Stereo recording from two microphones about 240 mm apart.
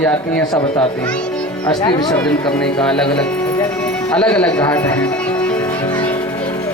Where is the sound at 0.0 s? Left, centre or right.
Centre.